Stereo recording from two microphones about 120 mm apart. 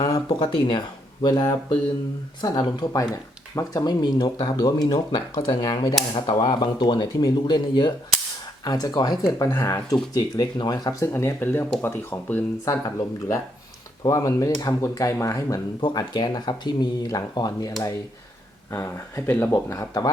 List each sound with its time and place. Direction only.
0.3 s speech: 40° left (ahead or behind)
18.7 s speech: 20° left (ahead or behind)
19.7 s speech: 30° left (ahead or behind)